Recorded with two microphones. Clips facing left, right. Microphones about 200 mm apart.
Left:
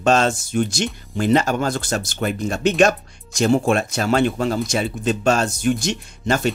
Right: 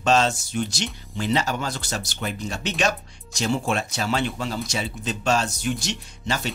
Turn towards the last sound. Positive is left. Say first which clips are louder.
# left 7 dB
turn(degrees=50)  # may be behind; listen again after turning